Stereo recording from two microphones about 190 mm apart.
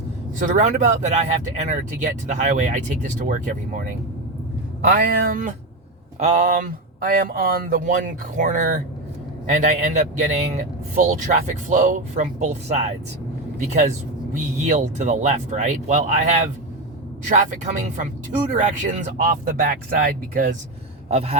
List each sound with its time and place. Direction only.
0.3 s speech: 40° right (ahead or behind)
4.9 s speech: 50° right (ahead or behind)
21.1 s a sound: 35° right (ahead or behind)